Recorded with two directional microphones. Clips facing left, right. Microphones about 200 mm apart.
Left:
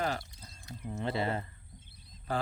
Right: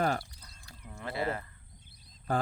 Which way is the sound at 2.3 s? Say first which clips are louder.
Right 3 dB; 50° right (ahead or behind).